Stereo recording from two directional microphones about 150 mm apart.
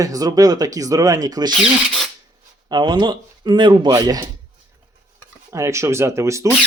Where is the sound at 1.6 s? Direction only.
Centre (ahead or behind).